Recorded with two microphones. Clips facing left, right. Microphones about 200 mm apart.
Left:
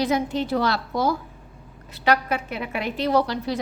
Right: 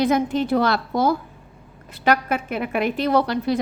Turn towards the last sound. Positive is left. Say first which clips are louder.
# right 2 dB
turn(degrees=-55)  # may be behind; listen again after turning